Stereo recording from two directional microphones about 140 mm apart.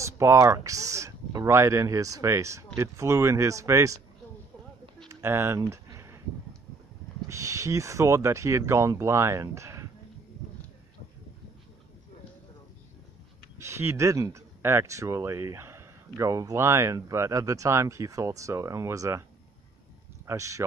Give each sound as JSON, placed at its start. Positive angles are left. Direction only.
{"t": 0.0, "sound": "speech", "side_deg": -20}
{"t": 5.0, "sound": "a sound", "side_deg": -20}
{"t": 7.2, "sound": "speech", "side_deg": -20}
{"t": 13.6, "sound": "speech", "side_deg": -20}
{"t": 20.2, "sound": "speech", "side_deg": -20}